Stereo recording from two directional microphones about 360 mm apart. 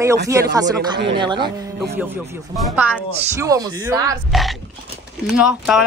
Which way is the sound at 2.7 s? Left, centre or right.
Centre.